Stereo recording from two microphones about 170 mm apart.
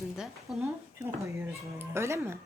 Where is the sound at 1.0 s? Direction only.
15° right (ahead or behind).